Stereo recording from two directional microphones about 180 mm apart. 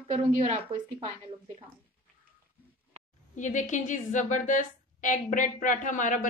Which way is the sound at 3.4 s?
45° left (ahead or behind).